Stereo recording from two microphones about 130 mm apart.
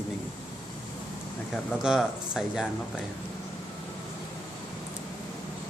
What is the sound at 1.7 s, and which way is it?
Speech, 5° right (ahead or behind).